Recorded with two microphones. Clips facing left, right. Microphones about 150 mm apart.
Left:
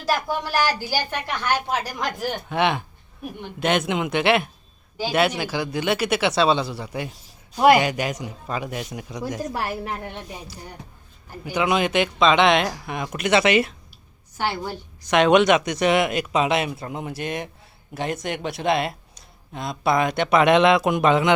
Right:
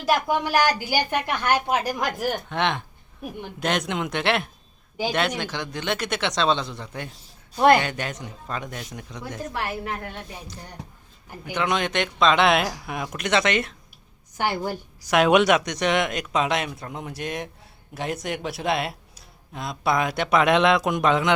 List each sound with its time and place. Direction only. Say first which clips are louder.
0.0 s a woman's voice: right 2 dB; 15° right (ahead or behind)
2.1 s speech: left 1 dB; 5° right (ahead or behind)
9.5 s a woman's voice: left 2 dB; 30° left (ahead or behind)
10.0 s speech: left 2 dB; 20° left (ahead or behind)
11.5 s speech: left 4 dB; 5° left (ahead or behind)
14.3 s a woman's voice: right 1 dB; 15° right (ahead or behind)
15.1 s speech: left 2 dB; 5° right (ahead or behind)